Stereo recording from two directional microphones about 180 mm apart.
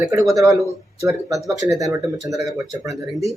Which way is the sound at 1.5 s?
20° right (ahead or behind).